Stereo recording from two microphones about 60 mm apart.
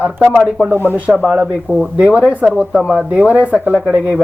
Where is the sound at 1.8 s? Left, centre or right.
Centre.